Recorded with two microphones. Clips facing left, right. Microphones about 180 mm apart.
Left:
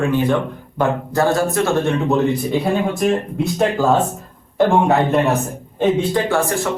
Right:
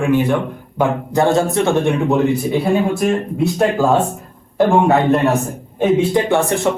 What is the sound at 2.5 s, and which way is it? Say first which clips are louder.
Speech: right 2 dB; centre (ahead or behind).